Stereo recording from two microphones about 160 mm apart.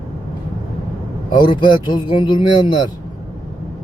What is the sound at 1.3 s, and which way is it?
Speech, 30° left (ahead or behind).